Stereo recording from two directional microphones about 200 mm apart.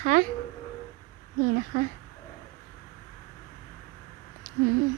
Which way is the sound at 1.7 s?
45° right (ahead or behind).